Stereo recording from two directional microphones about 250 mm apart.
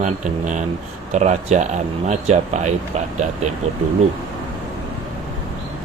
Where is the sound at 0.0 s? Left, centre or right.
Right.